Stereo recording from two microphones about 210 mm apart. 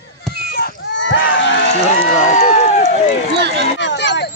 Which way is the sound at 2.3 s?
35° left (ahead or behind).